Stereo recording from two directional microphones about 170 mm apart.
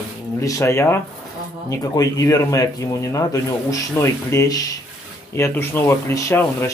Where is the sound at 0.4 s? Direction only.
20° left (ahead or behind).